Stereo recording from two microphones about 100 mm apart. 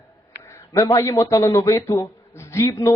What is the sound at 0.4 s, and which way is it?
A man's voice, 30° left (ahead or behind).